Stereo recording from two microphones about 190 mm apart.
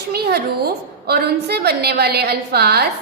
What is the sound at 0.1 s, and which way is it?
A woman's voice, 55° right (ahead or behind).